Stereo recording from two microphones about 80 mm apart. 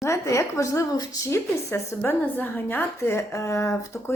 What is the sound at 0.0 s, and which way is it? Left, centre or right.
A woman's voice, left.